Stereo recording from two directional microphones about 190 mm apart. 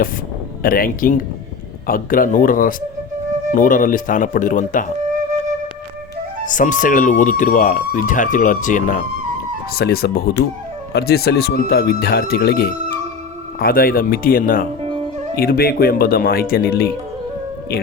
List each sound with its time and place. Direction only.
0.6 s speech: 50° left (ahead or behind)
6.4 s speech: 40° left (ahead or behind)
9.7 s speech: 55° left (ahead or behind)